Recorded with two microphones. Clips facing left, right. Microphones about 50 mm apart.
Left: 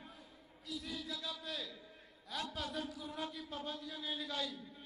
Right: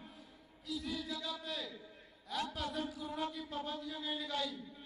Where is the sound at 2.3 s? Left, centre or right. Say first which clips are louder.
Right 3 dB; centre.